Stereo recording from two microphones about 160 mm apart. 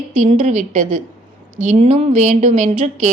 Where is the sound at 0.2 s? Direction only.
55° right (ahead or behind).